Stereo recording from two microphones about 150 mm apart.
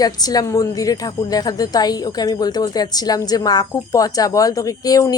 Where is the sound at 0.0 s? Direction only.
25° left (ahead or behind).